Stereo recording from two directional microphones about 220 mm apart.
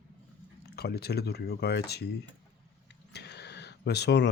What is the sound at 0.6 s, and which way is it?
Speech, 45° left (ahead or behind).